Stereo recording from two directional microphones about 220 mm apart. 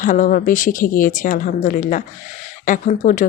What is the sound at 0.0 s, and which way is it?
Speech, 35° left (ahead or behind).